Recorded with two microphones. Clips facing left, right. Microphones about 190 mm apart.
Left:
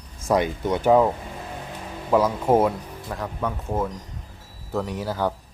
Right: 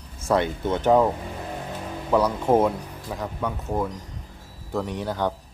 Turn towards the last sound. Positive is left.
turn(degrees=5)  # may be behind; listen again after turning